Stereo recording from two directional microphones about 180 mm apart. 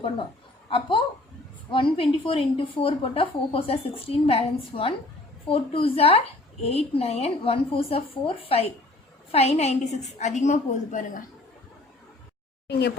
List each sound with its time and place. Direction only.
0.7 s a woman's voice: 30° left (ahead or behind)